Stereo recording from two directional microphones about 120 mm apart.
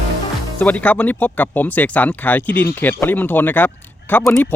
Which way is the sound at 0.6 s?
15° left (ahead or behind).